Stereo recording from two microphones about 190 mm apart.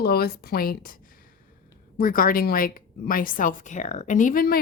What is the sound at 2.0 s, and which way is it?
A woman's voice, 50° left (ahead or behind).